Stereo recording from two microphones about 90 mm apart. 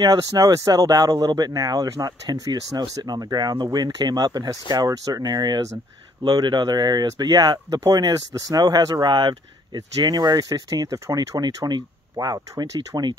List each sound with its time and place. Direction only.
0.0 s speech: 45° right (ahead or behind)